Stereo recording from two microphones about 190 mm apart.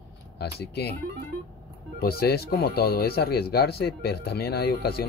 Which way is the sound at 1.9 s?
55° left (ahead or behind).